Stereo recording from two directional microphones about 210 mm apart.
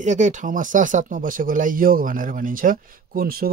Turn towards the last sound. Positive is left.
turn(degrees=-45)  # may be behind; listen again after turning